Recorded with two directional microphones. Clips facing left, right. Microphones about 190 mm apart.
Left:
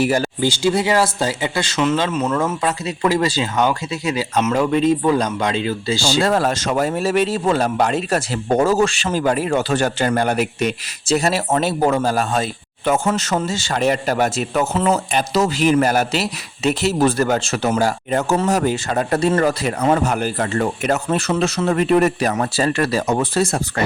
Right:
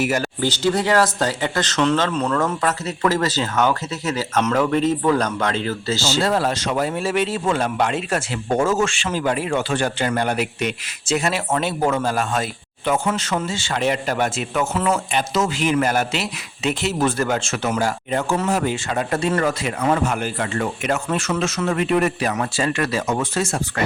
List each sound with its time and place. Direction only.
0.0 s speech: 30° left (ahead or behind)
0.3 s speech: 10° left (ahead or behind)
6.2 s speech: 50° left (ahead or behind)